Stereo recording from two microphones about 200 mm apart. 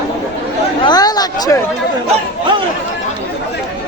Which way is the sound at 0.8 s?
20° left (ahead or behind).